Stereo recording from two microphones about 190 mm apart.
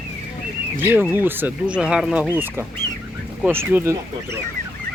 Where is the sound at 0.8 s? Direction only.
10° right (ahead or behind).